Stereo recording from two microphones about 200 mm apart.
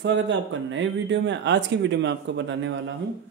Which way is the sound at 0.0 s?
65° right (ahead or behind).